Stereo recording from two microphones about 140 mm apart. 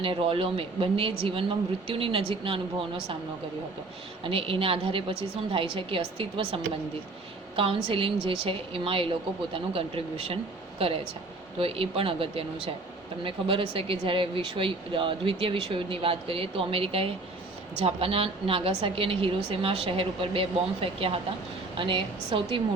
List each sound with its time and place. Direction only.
0.0 s speech: 40° right (ahead or behind)
4.2 s a woman's voice: 40° right (ahead or behind)